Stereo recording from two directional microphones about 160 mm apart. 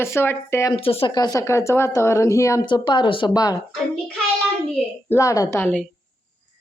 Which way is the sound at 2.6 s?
30° left (ahead or behind).